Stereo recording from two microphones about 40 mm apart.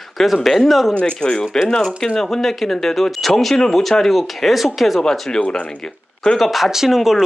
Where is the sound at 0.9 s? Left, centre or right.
Left.